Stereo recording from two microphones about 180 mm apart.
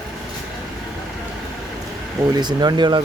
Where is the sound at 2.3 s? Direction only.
25° right (ahead or behind).